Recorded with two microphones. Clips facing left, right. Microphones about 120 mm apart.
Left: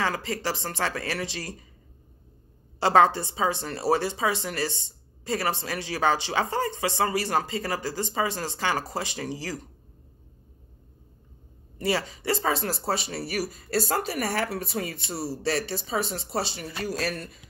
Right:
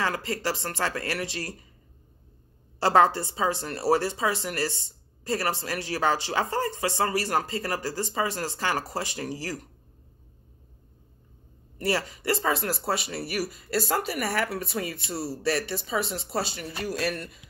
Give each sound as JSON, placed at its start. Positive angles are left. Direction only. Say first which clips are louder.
{"t": 0.1, "sound": "a woman's voice", "louder": "even", "side_deg": 25}
{"t": 2.8, "sound": "a woman's voice", "louder": "left 1 dB", "side_deg": 20}
{"t": 11.8, "sound": "a woman's voice", "louder": "even", "side_deg": 20}